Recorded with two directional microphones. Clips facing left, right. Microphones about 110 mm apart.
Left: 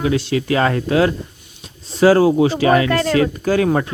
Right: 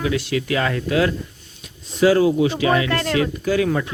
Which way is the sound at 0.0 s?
30° left (ahead or behind).